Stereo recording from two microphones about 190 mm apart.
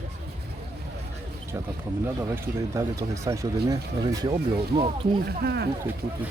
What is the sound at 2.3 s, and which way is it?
Speech, 15° right (ahead or behind).